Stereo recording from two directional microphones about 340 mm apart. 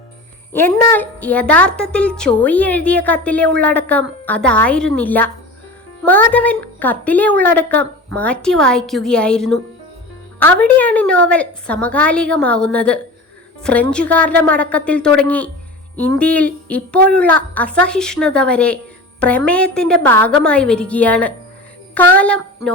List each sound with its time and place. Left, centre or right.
0.5 s a woman's voice: centre